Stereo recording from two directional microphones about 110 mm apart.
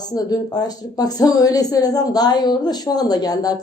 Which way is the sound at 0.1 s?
35° left (ahead or behind).